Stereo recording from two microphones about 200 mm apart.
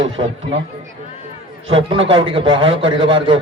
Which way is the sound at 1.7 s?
25° right (ahead or behind).